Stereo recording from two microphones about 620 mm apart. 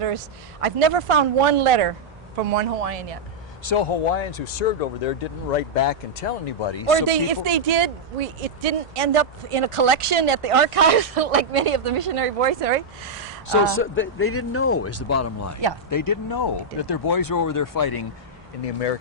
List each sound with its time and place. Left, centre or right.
0.6 s speech: right
2.5 s speech: right
3.6 s speech: left
4.0 s speech: left
6.6 s speech: left
6.9 s speech: right
13.7 s speech: centre; by 18.0 s left
18.6 s speech: left